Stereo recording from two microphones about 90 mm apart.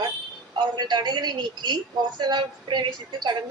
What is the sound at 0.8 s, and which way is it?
A woman's voice, 55° right (ahead or behind).